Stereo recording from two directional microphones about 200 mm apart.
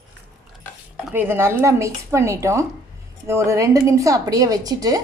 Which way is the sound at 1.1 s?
10° right (ahead or behind).